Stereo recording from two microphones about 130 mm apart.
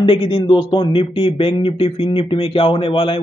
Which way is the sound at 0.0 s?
40° left (ahead or behind).